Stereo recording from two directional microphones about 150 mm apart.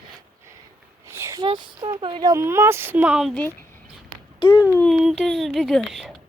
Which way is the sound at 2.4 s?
15° right (ahead or behind).